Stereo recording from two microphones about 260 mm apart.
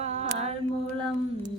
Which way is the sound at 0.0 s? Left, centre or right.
Right.